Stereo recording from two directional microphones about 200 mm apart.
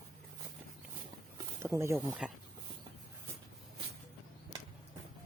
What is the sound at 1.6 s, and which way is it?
Speech, 15° right (ahead or behind).